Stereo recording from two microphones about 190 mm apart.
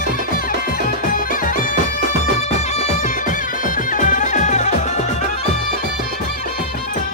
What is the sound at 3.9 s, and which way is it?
Music, 40° left (ahead or behind).